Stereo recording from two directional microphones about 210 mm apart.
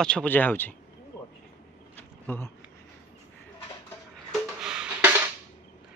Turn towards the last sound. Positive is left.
turn(degrees=-5)  # may be behind; listen again after turning